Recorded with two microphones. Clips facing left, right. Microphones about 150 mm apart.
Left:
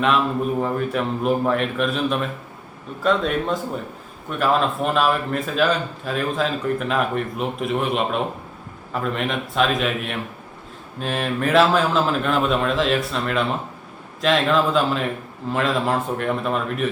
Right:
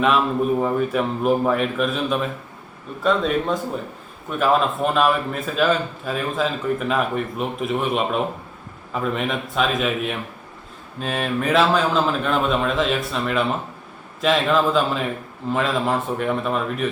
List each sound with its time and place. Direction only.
0.6 s a man's voice: 5° right (ahead or behind)